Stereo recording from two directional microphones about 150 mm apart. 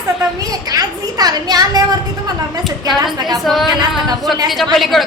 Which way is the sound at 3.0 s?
25° right (ahead or behind).